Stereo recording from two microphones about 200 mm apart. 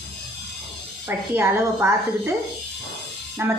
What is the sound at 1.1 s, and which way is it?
A woman's voice, 10° right (ahead or behind).